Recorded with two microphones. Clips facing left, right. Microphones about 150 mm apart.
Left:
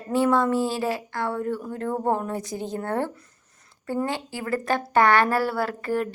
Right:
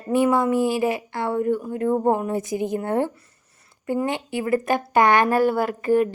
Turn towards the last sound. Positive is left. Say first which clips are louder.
# right 6 dB
turn(degrees=-15)  # may be behind; listen again after turning